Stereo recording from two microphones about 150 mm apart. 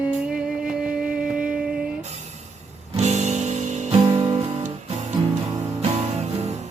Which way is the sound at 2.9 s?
50° right (ahead or behind).